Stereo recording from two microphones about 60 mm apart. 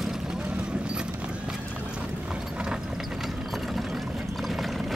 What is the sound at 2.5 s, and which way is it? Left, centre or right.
Clip-clop, centre.